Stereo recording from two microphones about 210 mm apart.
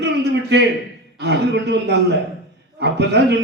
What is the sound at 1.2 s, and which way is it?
A man's voice, 55° right (ahead or behind).